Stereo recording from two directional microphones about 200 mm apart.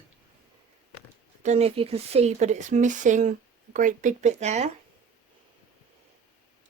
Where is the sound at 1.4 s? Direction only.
30° right (ahead or behind).